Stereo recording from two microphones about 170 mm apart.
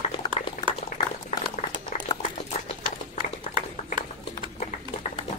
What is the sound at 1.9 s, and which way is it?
Boiling, 40° left (ahead or behind).